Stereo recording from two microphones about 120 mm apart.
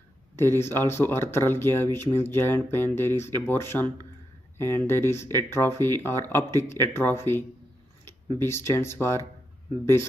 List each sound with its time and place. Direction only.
0.4 s speech: 20° left (ahead or behind)